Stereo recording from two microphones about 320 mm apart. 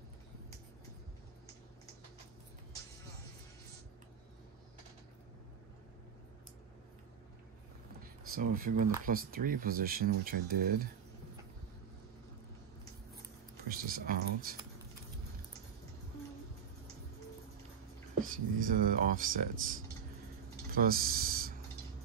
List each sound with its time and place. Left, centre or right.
8.3 s speech: right
13.7 s speech: right
18.2 s speech: right